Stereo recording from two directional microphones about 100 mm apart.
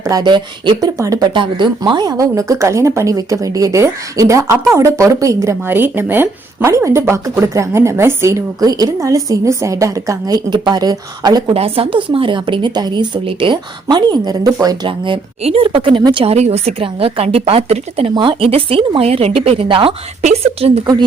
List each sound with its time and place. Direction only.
0.0 s speech: 40° right (ahead or behind)
0.8 s a woman's voice: 35° right (ahead or behind)
1.3 s a woman's voice: 50° right (ahead or behind)
11.5 s a woman's voice: 70° right (ahead or behind); by 13.1 s 45° right (ahead or behind)
13.2 s a woman's voice: 60° right (ahead or behind)
13.8 s a woman's voice: 45° right (ahead or behind)
14.8 s a woman's voice: 60° right (ahead or behind)
16.1 s a woman's voice: 85° right
18.1 s speech: 55° right (ahead or behind)
20.3 s a woman's voice: 90° right